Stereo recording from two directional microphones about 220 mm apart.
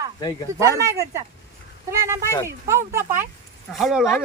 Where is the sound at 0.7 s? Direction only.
15° right (ahead or behind).